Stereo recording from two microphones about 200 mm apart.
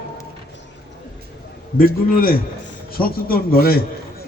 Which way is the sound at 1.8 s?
45° left (ahead or behind).